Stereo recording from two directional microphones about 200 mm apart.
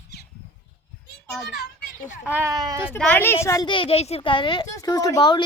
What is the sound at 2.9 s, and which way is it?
A woman's voice, 10° left (ahead or behind).